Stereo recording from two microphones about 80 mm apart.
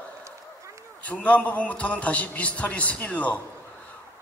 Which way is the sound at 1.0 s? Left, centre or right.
Centre.